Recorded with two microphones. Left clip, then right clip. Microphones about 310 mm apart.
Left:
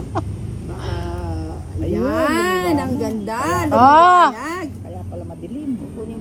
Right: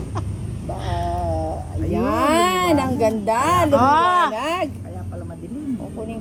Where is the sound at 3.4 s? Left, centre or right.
Centre.